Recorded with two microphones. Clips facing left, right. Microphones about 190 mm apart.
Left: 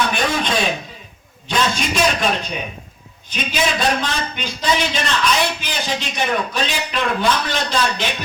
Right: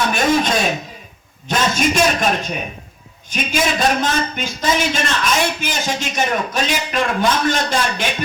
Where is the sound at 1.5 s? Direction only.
45° right (ahead or behind).